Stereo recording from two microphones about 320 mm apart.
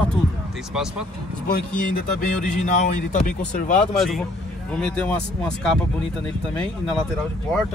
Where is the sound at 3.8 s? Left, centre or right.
Centre.